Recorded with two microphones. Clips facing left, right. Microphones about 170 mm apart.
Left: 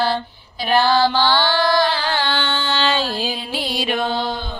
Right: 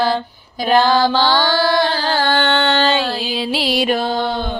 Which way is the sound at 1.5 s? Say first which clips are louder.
Right 1 dB; 30° right (ahead or behind).